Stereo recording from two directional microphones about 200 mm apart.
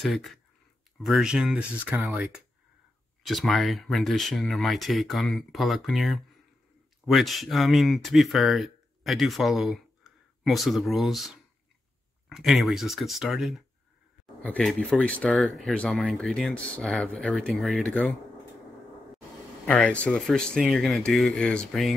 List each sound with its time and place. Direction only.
0.0 s speech: centre (ahead or behind)
19.6 s speech: 5° left (ahead or behind)